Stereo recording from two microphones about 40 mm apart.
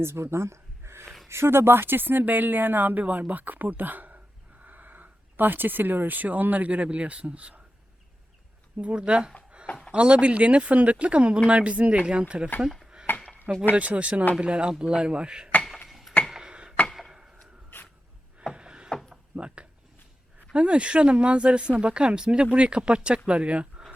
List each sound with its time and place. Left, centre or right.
0.0 s speech: right
8.8 s speech: right
13.1 s a sound: left
13.7 s speech: right
15.9 s tick-tock: centre
16.3 s a sound: right
16.9 s chop: centre
18.5 s wood: right
19.1 s a sound: right
20.5 s speech: right